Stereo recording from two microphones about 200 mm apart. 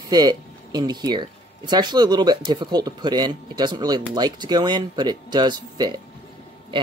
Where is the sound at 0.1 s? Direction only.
20° right (ahead or behind).